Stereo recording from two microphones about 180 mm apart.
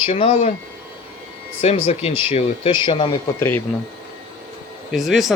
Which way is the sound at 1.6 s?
35° left (ahead or behind).